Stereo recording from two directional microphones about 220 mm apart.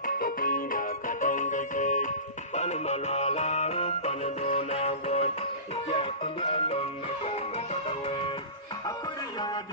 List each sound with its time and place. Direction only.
0.0 s music: 40° left (ahead or behind)